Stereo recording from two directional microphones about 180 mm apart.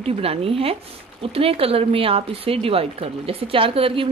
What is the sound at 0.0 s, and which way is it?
Speech, 35° right (ahead or behind).